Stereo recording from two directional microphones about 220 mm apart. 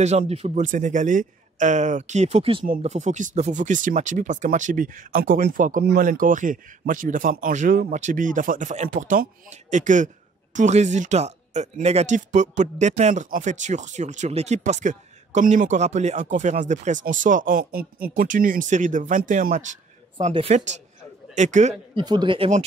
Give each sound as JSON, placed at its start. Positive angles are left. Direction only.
{"t": 0.0, "sound": "speech", "side_deg": -30}
{"t": 22.0, "sound": "speech", "side_deg": -20}